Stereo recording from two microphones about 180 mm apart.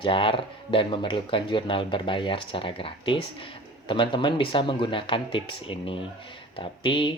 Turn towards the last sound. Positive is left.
turn(degrees=30)  # may be behind; listen again after turning